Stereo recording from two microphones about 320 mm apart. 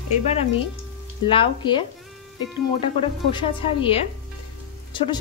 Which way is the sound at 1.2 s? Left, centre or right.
Centre.